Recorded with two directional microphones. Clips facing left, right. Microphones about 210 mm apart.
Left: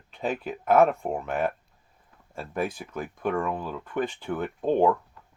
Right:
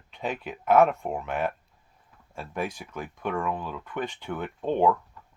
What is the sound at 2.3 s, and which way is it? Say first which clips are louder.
Speech: left 2 dB; 50° left (ahead or behind).